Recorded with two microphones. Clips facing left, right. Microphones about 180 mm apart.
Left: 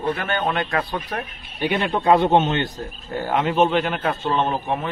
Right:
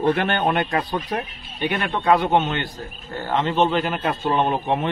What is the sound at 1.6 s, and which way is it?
Speech, 10° left (ahead or behind).